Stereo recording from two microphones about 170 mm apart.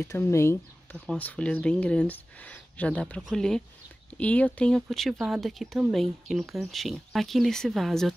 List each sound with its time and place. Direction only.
0.0 s speech: 15° left (ahead or behind)